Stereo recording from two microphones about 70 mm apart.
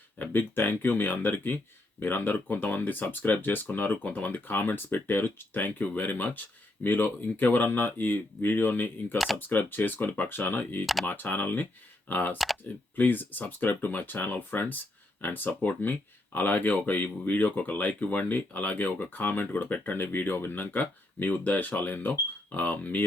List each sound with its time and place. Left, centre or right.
0.2 s speech: left
9.1 s speech: centre
9.5 s speech: left